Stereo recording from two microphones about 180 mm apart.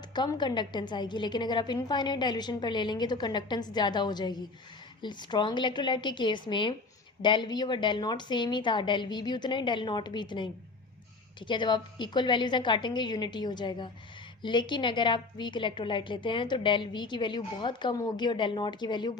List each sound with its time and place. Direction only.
0.1 s a woman's voice: 25° left (ahead or behind)